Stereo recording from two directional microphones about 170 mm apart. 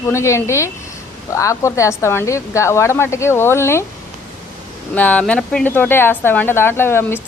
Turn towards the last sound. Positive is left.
turn(degrees=15)  # may be behind; listen again after turning